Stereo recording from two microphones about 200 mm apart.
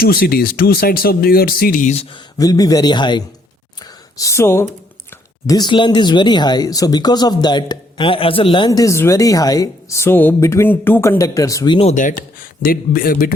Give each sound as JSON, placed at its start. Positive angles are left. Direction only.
{"t": 0.0, "sound": "speech", "side_deg": 50}
{"t": 2.4, "sound": "speech", "side_deg": 20}